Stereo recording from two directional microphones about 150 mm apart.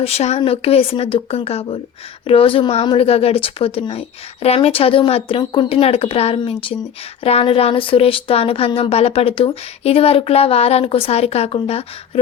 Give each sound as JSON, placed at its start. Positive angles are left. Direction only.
{"t": 0.0, "sound": "speech", "side_deg": 45}